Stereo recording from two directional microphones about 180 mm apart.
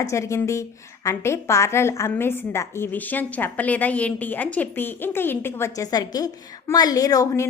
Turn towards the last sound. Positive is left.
turn(degrees=15)  # may be behind; listen again after turning